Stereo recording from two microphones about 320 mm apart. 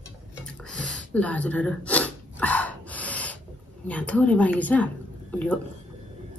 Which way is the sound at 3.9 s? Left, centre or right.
Centre.